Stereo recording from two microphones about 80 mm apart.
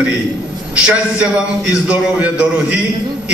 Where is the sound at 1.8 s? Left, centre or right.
Centre.